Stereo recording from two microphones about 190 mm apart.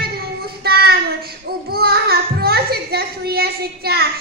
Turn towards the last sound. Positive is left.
turn(degrees=-55)  # may be behind; listen again after turning